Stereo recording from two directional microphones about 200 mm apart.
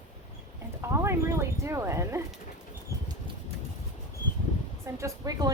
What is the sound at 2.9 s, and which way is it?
Bird flight, 15° right (ahead or behind).